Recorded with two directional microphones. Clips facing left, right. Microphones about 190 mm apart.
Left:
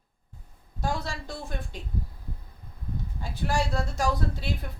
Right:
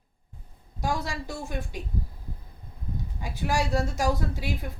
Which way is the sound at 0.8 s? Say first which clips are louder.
Right 2 dB; 10° right (ahead or behind).